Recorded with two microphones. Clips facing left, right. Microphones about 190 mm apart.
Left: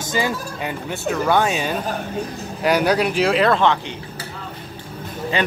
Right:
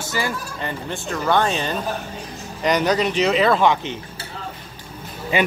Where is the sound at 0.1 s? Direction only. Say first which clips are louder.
Left 4 dB; 20° left (ahead or behind).